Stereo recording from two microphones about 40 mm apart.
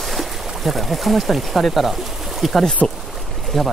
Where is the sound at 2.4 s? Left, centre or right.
Centre.